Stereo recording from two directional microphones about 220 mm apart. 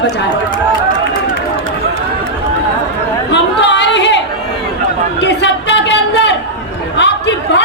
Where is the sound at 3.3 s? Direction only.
55° left (ahead or behind).